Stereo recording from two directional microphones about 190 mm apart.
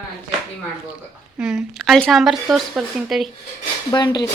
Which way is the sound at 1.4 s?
5° right (ahead or behind).